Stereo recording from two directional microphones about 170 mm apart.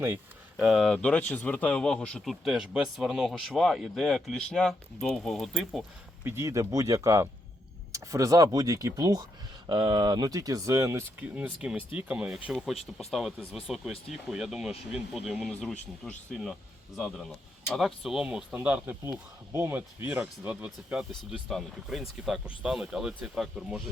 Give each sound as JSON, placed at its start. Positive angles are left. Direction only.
{"t": 0.5, "sound": "speech", "side_deg": -5}
{"t": 0.9, "sound": "speech", "side_deg": 10}
{"t": 6.2, "sound": "speech", "side_deg": -15}